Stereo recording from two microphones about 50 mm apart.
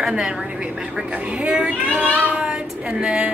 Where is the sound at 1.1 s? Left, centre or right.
Right.